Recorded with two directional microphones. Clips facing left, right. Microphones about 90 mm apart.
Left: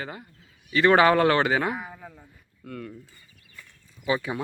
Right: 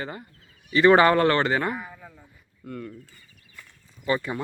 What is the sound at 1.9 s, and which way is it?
Speech, 35° left (ahead or behind).